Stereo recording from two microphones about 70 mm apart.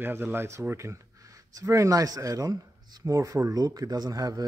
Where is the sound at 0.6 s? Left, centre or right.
Right.